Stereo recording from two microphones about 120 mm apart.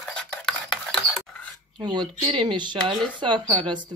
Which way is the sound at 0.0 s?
5° left (ahead or behind).